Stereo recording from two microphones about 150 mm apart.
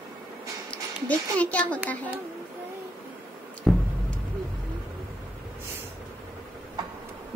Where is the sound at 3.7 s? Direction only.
Centre (ahead or behind).